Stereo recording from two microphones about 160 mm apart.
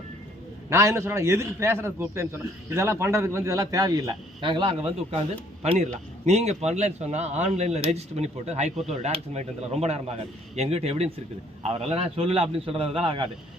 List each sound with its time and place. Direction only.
0.7 s a man's voice: 20° right (ahead or behind); by 13.2 s 35° right (ahead or behind)